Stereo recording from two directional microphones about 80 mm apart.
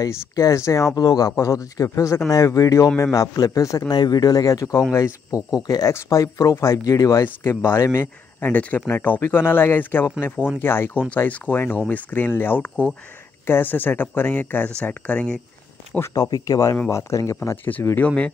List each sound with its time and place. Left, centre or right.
0.0 s speech: left
0.9 s a man's voice: left
7.2 s speech: left
8.4 s speech: left
16.1 s a man's voice: left
18.0 s speech: centre